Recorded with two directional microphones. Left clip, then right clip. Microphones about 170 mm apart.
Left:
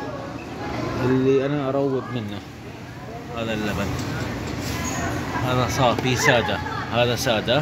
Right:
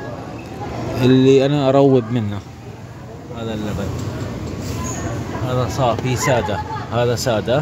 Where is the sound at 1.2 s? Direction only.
90° right.